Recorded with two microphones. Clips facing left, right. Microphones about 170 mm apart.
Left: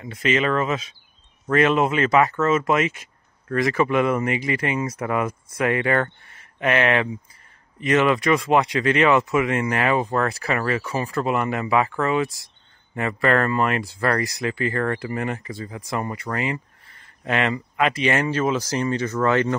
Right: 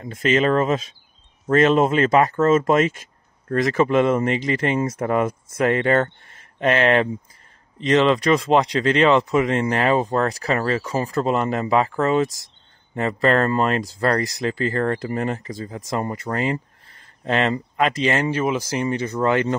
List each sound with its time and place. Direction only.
0.0 s speech: 45° right (ahead or behind)
1.5 s speech: 30° right (ahead or behind)
2.5 s speech: 45° right (ahead or behind)
3.7 s speech: 25° right (ahead or behind)
9.2 s speech: 35° right (ahead or behind)
18.3 s speech: 15° right (ahead or behind)